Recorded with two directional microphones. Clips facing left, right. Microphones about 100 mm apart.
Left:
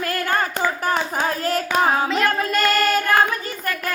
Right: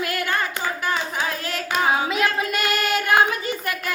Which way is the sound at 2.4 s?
10° right (ahead or behind).